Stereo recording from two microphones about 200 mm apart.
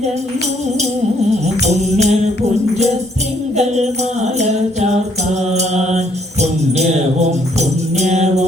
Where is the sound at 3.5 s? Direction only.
35° right (ahead or behind).